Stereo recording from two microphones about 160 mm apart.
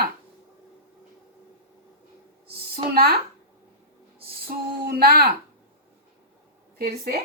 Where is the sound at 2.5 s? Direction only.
75° right (ahead or behind).